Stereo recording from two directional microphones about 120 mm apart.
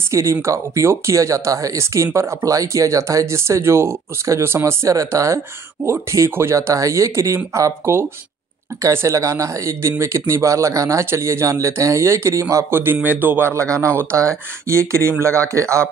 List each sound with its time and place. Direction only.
0.1 s speech: 25° right (ahead or behind)